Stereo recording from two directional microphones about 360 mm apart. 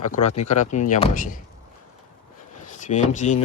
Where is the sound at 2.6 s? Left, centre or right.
Left.